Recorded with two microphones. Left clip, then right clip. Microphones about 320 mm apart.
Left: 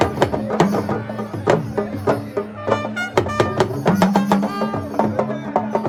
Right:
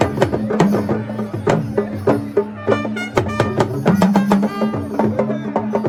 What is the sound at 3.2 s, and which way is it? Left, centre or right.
Music, left.